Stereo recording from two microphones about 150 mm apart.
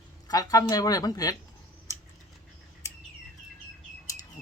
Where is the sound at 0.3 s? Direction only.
25° left (ahead or behind).